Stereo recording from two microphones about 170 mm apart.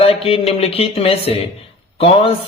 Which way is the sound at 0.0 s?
35° left (ahead or behind).